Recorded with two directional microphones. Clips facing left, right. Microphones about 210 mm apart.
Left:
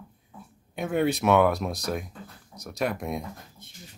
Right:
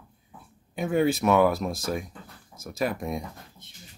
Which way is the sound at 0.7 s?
Centre (ahead or behind).